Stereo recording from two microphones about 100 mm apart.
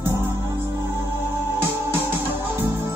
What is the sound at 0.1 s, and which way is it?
Music, 20° right (ahead or behind).